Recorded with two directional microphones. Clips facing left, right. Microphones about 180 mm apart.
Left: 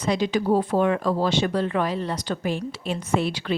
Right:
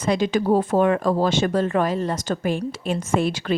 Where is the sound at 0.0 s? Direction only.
50° right (ahead or behind).